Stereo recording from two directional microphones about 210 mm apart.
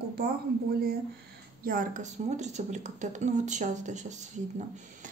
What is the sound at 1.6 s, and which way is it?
Speech, 45° right (ahead or behind).